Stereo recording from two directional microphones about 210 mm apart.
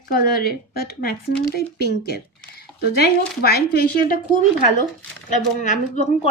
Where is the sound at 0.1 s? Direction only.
45° left (ahead or behind).